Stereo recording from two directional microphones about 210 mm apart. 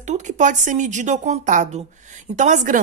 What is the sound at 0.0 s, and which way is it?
Speech, 35° right (ahead or behind).